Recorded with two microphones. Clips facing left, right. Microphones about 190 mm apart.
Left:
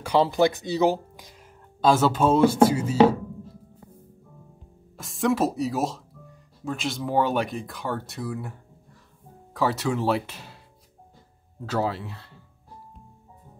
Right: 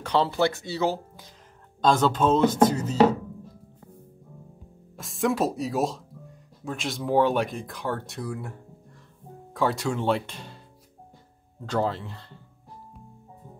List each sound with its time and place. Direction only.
0.0 s speech: 10° left (ahead or behind)
4.9 s speech: centre (ahead or behind)
11.6 s speech: 5° left (ahead or behind)